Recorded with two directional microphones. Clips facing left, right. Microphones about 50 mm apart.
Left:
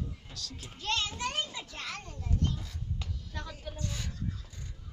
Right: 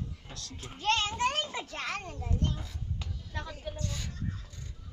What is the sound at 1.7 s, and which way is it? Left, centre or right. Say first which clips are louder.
Speech: right 5 dB; right.